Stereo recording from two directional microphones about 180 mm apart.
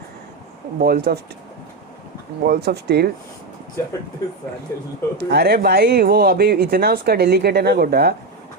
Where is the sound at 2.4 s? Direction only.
60° right (ahead or behind).